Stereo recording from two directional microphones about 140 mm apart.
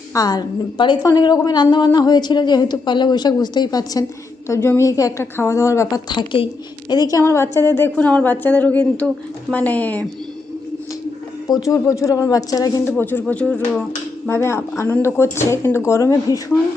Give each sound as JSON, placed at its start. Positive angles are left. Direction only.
{"t": 0.1, "sound": "a woman's voice", "side_deg": 25}
{"t": 6.1, "sound": "a woman's voice", "side_deg": 35}
{"t": 11.6, "sound": "speech", "side_deg": 25}
{"t": 13.0, "sound": "a woman's voice", "side_deg": 15}